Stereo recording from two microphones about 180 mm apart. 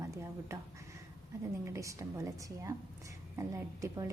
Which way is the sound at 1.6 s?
15° right (ahead or behind).